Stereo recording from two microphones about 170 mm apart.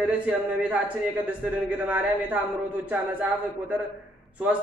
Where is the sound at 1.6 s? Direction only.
10° right (ahead or behind).